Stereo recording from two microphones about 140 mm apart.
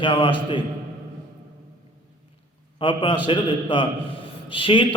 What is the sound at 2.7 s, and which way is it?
A man's voice, 35° left (ahead or behind).